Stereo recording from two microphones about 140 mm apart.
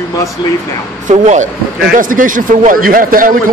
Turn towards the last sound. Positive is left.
turn(degrees=-85)